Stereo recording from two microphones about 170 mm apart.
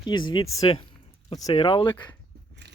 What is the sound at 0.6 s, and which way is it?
Speech, 30° left (ahead or behind).